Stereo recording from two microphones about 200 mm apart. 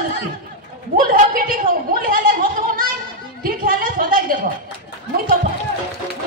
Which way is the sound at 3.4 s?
45° right (ahead or behind).